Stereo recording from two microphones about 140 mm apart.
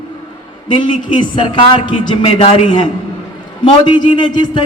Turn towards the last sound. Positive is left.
turn(degrees=35)  # may be behind; listen again after turning